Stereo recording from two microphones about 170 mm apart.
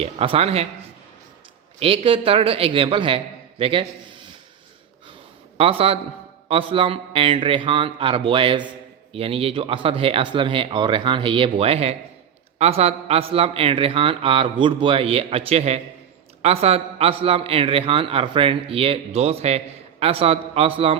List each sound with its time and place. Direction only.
0.0 s a man's voice: 35° right (ahead or behind)
1.8 s a man's voice: 35° right (ahead or behind)
5.5 s a man's voice: 35° right (ahead or behind)